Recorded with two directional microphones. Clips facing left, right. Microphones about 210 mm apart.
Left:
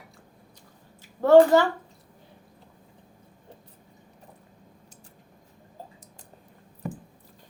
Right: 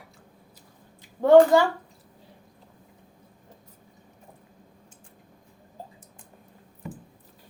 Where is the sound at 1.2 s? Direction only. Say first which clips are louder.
Even; 15° right (ahead or behind).